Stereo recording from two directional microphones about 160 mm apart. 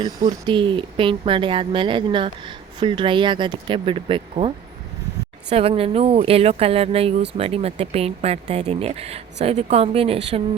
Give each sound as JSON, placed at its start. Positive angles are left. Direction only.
{"t": 0.0, "sound": "speech", "side_deg": -25}